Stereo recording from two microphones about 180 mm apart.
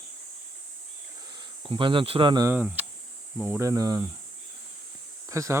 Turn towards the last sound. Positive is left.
turn(degrees=-15)  # may be behind; listen again after turning